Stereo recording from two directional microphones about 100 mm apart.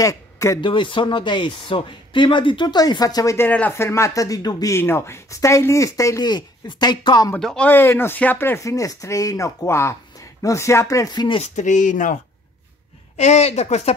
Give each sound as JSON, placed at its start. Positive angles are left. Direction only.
{"t": 0.0, "sound": "speech", "side_deg": 35}
{"t": 0.6, "sound": "speech", "side_deg": 55}
{"t": 3.3, "sound": "speech", "side_deg": 15}
{"t": 4.7, "sound": "speech", "side_deg": 25}
{"t": 7.3, "sound": "speech", "side_deg": 10}
{"t": 7.7, "sound": "speech", "side_deg": 20}
{"t": 8.7, "sound": "speech", "side_deg": 35}
{"t": 11.2, "sound": "speech", "side_deg": 65}
{"t": 13.4, "sound": "a woman's voice", "side_deg": 90}